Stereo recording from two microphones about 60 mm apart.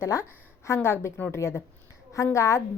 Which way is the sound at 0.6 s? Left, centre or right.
Left.